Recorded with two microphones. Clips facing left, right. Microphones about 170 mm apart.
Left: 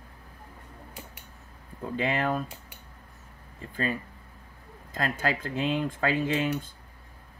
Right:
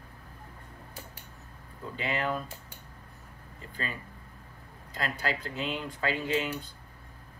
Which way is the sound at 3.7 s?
45° left (ahead or behind).